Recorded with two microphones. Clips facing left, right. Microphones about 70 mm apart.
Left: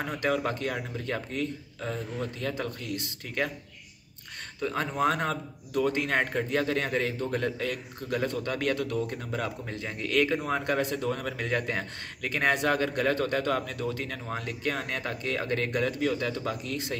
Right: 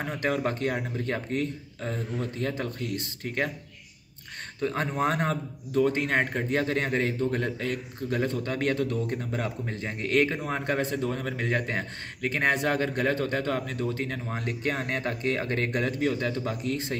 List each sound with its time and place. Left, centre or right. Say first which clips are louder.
0.5 s speech: right 3 dB; right
4.6 s a man's voice: right 1 dB; right
6.5 s a man's voice: right 2 dB; right